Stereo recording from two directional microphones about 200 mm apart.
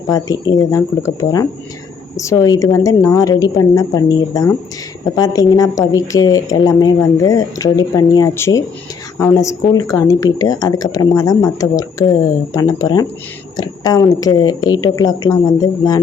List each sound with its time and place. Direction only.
0.1 s a woman's voice: 15° left (ahead or behind)